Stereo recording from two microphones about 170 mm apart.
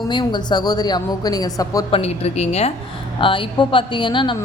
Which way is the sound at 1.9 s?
40° left (ahead or behind).